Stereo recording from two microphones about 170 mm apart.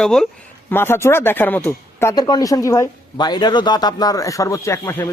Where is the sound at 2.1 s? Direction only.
25° left (ahead or behind).